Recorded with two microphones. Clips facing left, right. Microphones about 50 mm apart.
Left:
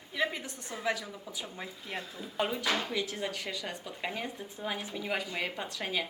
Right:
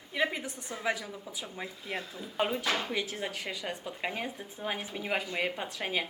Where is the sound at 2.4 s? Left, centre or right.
Centre.